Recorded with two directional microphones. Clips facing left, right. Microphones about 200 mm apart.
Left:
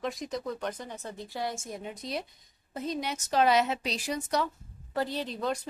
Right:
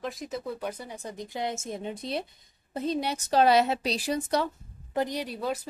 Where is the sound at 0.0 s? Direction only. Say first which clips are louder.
Left 1 dB; centre (ahead or behind); by 4.5 s 30° right (ahead or behind).